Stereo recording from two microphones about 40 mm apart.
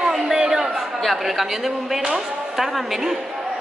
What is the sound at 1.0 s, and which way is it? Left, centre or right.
A woman's voice, centre.